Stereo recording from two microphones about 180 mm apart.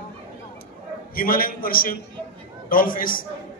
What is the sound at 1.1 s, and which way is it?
A man's voice, 55° left (ahead or behind).